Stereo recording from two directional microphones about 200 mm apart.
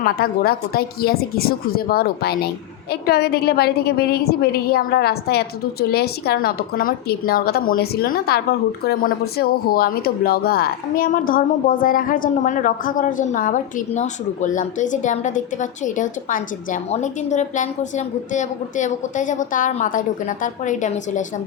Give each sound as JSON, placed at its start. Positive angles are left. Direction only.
{"t": 0.0, "sound": "a woman's voice", "side_deg": 50}